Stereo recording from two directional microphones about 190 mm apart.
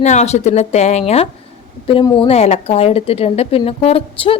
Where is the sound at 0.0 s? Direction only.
35° left (ahead or behind).